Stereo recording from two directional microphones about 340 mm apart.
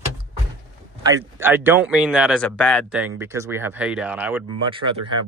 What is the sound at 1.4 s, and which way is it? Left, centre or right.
Speech, centre.